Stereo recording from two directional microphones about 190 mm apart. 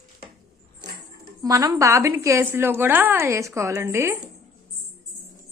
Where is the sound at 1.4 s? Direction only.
20° right (ahead or behind).